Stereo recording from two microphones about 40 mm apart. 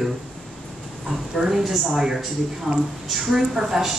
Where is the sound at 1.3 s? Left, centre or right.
Centre.